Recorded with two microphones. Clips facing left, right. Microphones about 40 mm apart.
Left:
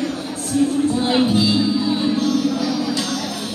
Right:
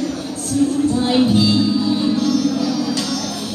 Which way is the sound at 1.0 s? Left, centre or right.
Left.